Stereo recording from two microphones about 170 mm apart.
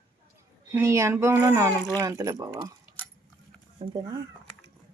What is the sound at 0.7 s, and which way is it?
Speech, 15° right (ahead or behind).